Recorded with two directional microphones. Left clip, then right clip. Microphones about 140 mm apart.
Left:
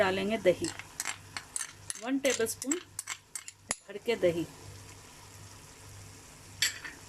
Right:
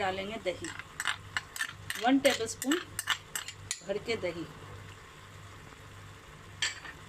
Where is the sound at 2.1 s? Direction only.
60° left (ahead or behind).